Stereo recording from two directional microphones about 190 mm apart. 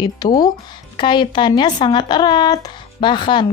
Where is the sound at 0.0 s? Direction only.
20° left (ahead or behind).